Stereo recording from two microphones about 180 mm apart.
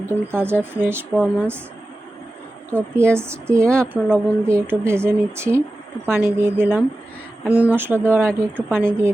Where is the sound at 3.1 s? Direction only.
15° right (ahead or behind).